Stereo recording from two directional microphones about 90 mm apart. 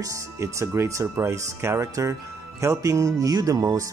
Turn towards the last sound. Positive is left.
turn(degrees=-40)  # may be behind; listen again after turning